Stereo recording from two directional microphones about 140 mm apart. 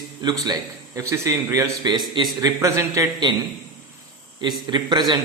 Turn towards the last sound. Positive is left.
turn(degrees=-30)  # may be behind; listen again after turning